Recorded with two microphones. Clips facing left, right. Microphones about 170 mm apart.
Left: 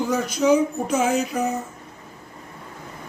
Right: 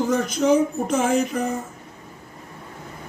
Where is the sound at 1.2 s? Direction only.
55° right (ahead or behind).